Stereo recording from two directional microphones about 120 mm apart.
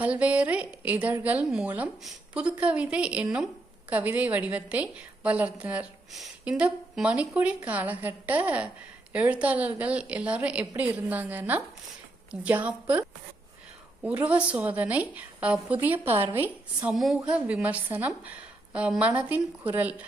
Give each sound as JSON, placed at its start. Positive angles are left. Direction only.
{"t": 0.0, "sound": "a woman's voice", "side_deg": -10}
{"t": 16.9, "sound": "a woman's voice", "side_deg": 0}